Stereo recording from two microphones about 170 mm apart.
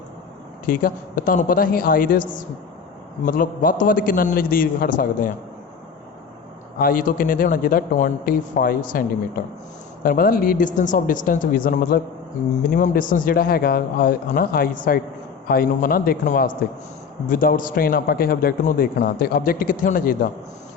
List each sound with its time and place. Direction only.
0.7 s a man's voice: 55° left (ahead or behind)
6.7 s a man's voice: 60° left (ahead or behind)